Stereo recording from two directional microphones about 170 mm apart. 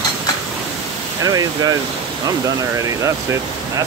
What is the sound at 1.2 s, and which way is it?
Speech, 20° right (ahead or behind).